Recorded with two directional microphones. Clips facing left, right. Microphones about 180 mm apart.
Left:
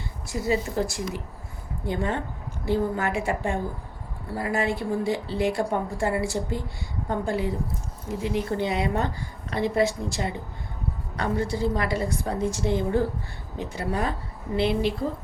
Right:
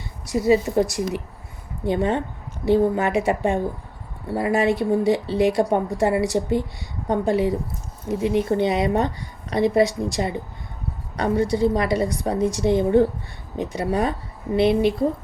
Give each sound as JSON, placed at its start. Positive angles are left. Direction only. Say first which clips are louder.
{"t": 0.3, "sound": "a woman's voice", "louder": "right 8 dB", "side_deg": -20}